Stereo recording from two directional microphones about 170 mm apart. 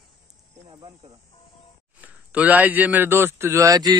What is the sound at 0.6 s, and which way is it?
Cricket, 30° right (ahead or behind).